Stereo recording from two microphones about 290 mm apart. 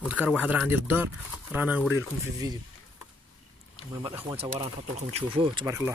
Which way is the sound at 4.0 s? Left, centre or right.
Centre.